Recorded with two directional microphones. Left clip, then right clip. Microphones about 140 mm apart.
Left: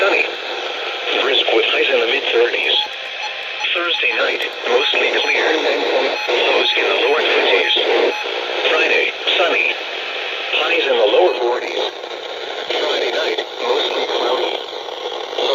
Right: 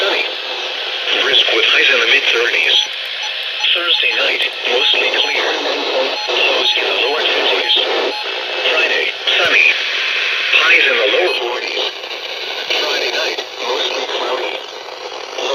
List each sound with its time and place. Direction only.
1.3 s speech: 30° left (ahead or behind)
5.4 s speech: 90° left
6.4 s speech: 40° left (ahead or behind)
9.4 s speech: 35° left (ahead or behind)
12.7 s radio: 60° left (ahead or behind); by 14.5 s 85° left